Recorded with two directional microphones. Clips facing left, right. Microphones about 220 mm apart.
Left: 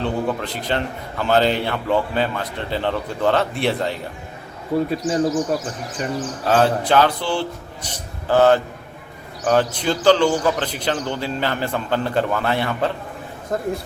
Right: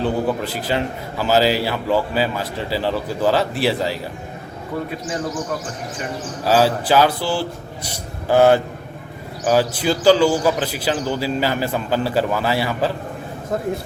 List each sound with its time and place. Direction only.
0.0 s a man's voice: 5° right (ahead or behind)
4.7 s a man's voice: 30° left (ahead or behind)
6.4 s a man's voice: 5° right (ahead or behind)